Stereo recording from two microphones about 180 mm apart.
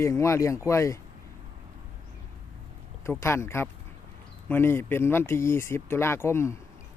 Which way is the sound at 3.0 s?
15° left (ahead or behind).